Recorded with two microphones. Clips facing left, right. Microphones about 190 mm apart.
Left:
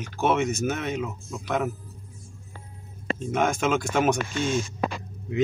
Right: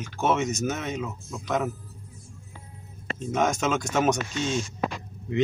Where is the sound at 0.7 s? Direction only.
Centre (ahead or behind).